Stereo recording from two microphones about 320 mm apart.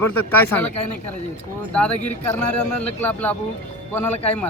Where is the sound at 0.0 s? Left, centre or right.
Centre.